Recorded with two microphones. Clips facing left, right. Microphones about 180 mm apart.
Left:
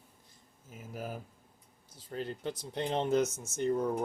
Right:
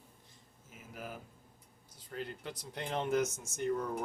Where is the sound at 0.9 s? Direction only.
40° left (ahead or behind).